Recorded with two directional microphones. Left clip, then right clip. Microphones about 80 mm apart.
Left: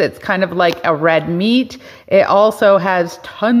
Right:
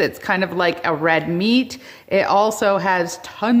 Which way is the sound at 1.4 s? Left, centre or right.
Right.